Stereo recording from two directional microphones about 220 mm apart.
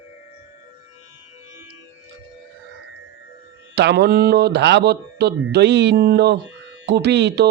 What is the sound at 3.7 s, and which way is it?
Mantra, 50° right (ahead or behind).